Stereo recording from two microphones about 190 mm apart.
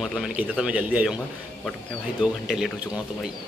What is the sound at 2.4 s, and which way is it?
Speech, centre (ahead or behind).